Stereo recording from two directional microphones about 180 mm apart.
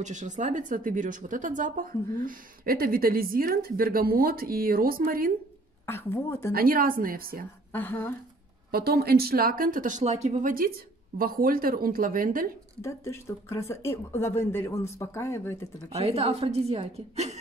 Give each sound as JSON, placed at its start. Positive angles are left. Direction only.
{"t": 0.0, "sound": "speech", "side_deg": -45}
{"t": 5.9, "sound": "speech", "side_deg": 10}
{"t": 6.5, "sound": "speech", "side_deg": -55}
{"t": 7.7, "sound": "speech", "side_deg": 10}
{"t": 8.7, "sound": "speech", "side_deg": -60}
{"t": 11.1, "sound": "speech", "side_deg": -55}
{"t": 12.8, "sound": "speech", "side_deg": 15}
{"t": 15.9, "sound": "a woman's voice", "side_deg": -35}